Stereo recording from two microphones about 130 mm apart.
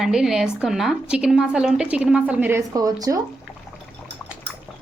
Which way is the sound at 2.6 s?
25° right (ahead or behind).